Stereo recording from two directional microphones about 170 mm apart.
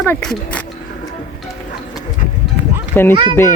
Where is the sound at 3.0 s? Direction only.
10° left (ahead or behind).